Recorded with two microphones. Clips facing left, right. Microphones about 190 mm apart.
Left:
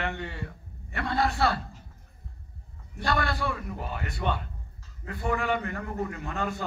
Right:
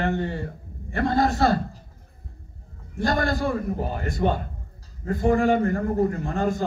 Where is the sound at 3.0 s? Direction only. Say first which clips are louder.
Right 5 dB; 40° right (ahead or behind).